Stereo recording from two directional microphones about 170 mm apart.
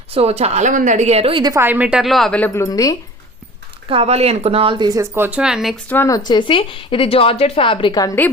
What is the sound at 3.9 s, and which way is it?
Speech, 35° right (ahead or behind).